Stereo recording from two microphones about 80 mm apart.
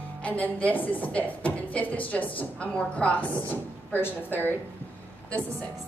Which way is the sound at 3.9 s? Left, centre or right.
Left.